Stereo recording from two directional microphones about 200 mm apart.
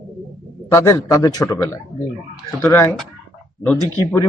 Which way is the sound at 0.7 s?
15° left (ahead or behind).